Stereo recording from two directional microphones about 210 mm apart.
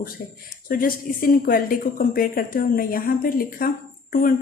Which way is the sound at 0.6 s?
40° left (ahead or behind).